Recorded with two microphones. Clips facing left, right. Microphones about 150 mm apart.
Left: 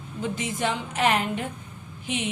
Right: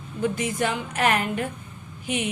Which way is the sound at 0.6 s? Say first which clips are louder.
Even; 20° left (ahead or behind).